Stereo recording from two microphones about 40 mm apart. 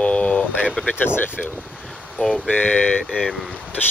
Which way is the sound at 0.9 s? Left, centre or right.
Left.